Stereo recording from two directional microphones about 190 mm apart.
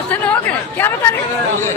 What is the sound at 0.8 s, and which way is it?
Speech, 10° left (ahead or behind).